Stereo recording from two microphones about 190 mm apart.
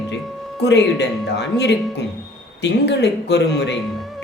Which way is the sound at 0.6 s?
65° left (ahead or behind).